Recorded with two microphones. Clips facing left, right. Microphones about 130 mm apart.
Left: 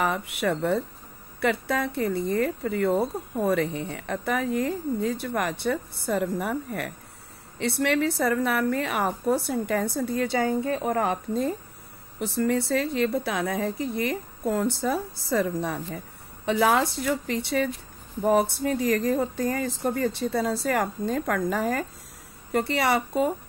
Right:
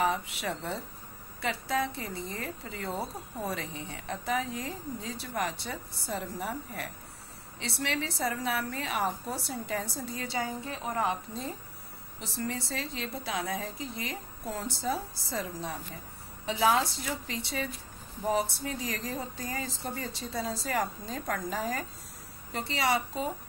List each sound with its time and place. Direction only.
0.0 s a woman's voice: 55° left (ahead or behind)